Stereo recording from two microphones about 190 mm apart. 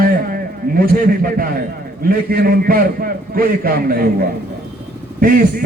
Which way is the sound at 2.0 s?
50° right (ahead or behind).